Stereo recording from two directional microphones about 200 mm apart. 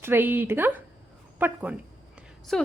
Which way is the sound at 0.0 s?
10° right (ahead or behind).